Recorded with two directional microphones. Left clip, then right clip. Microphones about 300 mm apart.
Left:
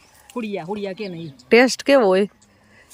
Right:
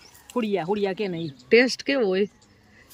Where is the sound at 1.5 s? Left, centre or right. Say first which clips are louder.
Left 5 dB; centre.